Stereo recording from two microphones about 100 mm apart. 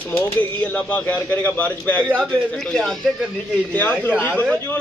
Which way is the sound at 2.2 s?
5° left (ahead or behind).